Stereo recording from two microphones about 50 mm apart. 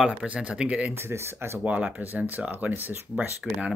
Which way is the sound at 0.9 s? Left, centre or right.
Right.